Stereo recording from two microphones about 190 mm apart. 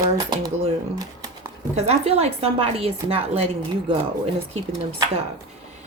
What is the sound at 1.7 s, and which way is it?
Speech, 35° right (ahead or behind).